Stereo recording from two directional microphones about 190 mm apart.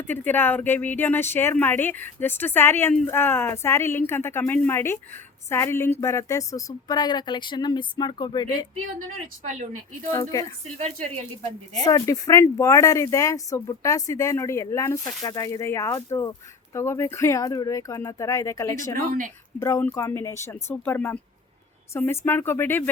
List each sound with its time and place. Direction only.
0.0 s a woman's voice: 10° left (ahead or behind)
10.1 s speech: 15° left (ahead or behind)
10.8 s speech: 35° right (ahead or behind)
11.8 s speech: 20° left (ahead or behind)